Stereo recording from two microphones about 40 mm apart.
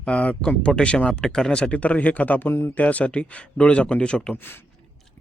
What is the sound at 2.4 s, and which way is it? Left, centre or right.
Speech, left.